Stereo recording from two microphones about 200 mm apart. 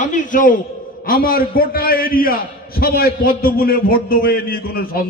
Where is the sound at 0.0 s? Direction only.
40° left (ahead or behind).